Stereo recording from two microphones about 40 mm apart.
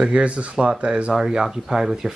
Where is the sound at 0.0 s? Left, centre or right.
Right.